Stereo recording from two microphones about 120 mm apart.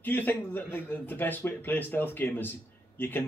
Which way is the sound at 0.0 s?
15° left (ahead or behind).